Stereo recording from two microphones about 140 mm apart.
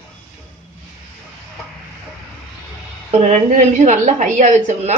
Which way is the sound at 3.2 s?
60° right (ahead or behind).